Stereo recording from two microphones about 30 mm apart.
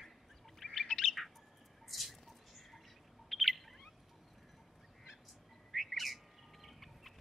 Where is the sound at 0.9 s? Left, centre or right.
Centre.